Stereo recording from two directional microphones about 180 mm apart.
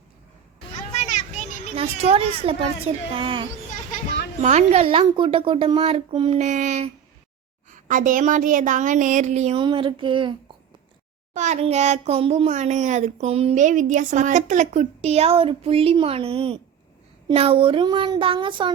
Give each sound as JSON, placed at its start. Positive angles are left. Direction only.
{"t": 0.9, "sound": "children playing", "side_deg": 40}
{"t": 1.7, "sound": "speech", "side_deg": -35}
{"t": 6.4, "sound": "a woman's voice", "side_deg": -40}
{"t": 11.3, "sound": "speech", "side_deg": -40}